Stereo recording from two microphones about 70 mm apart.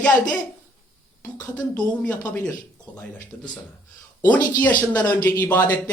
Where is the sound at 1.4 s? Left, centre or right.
Left.